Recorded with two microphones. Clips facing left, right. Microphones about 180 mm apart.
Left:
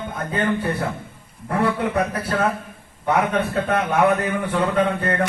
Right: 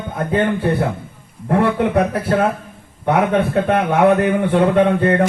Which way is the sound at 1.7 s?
65° right (ahead or behind).